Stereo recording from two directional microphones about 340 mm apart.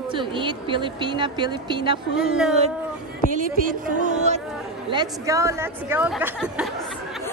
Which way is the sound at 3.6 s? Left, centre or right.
Right.